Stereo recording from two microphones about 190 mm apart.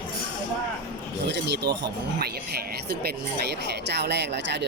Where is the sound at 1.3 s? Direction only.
65° right (ahead or behind).